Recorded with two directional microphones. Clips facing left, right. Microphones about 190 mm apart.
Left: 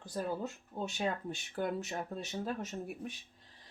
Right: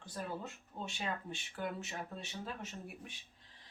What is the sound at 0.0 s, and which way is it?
Speech, 40° left (ahead or behind).